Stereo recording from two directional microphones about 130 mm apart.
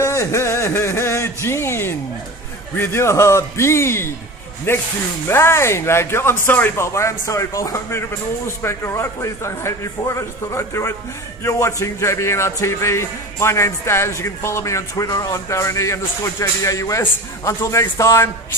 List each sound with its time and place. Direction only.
0.0 s music: 25° left (ahead or behind)
2.7 s speech: 20° left (ahead or behind)